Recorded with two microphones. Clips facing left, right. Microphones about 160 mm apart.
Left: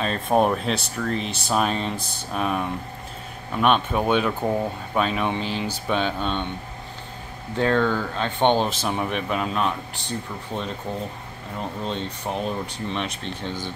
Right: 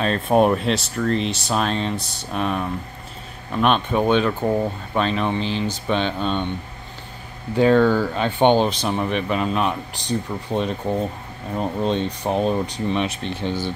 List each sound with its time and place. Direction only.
0.0 s speech: centre (ahead or behind)
7.5 s speech: 10° right (ahead or behind)
9.9 s speech: 15° right (ahead or behind)
12.9 s speech: 5° right (ahead or behind)